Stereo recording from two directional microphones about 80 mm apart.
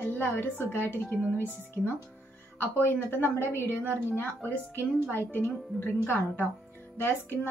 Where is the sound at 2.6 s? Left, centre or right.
Left.